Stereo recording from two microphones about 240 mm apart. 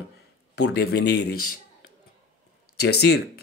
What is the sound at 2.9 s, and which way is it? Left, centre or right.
Speech, left.